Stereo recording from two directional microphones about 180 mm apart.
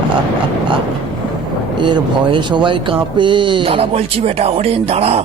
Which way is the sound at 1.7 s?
25° right (ahead or behind).